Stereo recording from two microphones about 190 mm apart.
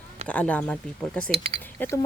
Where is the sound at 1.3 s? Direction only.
30° right (ahead or behind).